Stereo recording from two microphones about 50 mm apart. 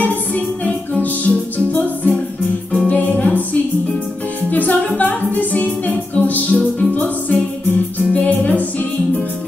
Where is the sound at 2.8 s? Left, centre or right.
Left.